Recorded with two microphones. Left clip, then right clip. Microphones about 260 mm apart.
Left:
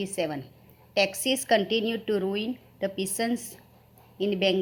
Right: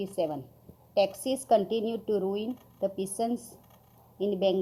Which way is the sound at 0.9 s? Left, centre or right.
Left.